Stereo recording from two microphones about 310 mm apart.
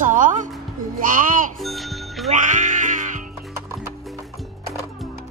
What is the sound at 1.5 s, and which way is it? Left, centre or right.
Music, centre.